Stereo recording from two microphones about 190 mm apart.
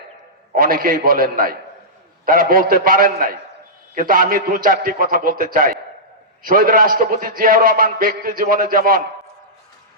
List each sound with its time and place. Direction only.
0.5 s a man's voice: 50° right (ahead or behind)